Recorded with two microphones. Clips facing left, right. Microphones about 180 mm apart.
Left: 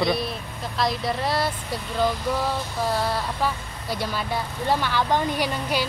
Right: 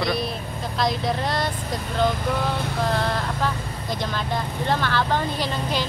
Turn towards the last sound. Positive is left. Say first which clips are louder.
# left 1 dB
turn(degrees=10)  # may be behind; listen again after turning